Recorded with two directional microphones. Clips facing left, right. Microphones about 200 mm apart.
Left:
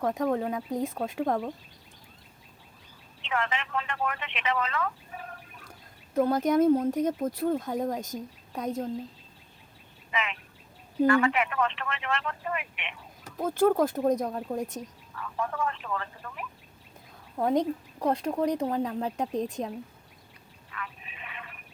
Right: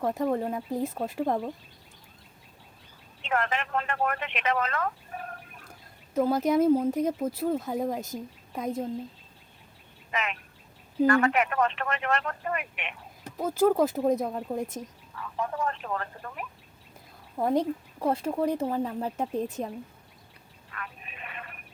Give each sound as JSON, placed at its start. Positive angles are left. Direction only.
{"t": 0.0, "sound": "speech", "side_deg": -5}
{"t": 3.2, "sound": "speech", "side_deg": -50}
{"t": 6.1, "sound": "speech", "side_deg": -5}
{"t": 10.1, "sound": "speech", "side_deg": -45}
{"t": 13.3, "sound": "speech", "side_deg": -5}
{"t": 15.5, "sound": "speech", "side_deg": -40}
{"t": 17.3, "sound": "a woman's voice", "side_deg": -10}
{"t": 20.7, "sound": "telephone", "side_deg": -50}